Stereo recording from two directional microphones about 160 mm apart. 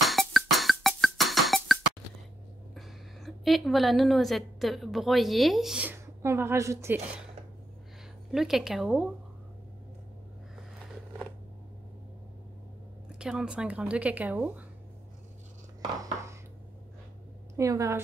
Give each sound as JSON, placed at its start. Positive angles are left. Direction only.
{"t": 0.0, "sound": "music", "side_deg": 0}
{"t": 2.7, "sound": "a woman's voice", "side_deg": 0}
{"t": 8.3, "sound": "a woman's voice", "side_deg": 0}
{"t": 13.2, "sound": "a woman's voice", "side_deg": -5}
{"t": 17.6, "sound": "a woman's voice", "side_deg": -20}